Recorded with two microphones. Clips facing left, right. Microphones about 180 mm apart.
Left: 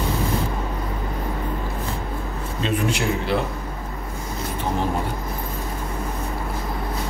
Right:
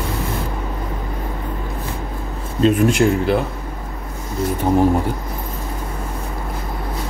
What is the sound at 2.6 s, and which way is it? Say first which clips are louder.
Speech: right 9 dB; 50° right (ahead or behind).